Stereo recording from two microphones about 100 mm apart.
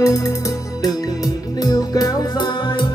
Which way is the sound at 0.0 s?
30° left (ahead or behind).